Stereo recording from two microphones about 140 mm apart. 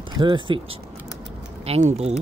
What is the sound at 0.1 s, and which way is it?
Speech, 35° right (ahead or behind).